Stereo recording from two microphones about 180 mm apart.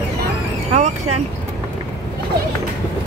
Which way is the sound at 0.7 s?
40° right (ahead or behind).